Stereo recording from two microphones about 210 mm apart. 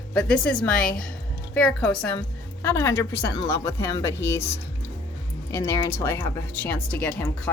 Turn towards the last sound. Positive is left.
turn(degrees=5)  # may be behind; listen again after turning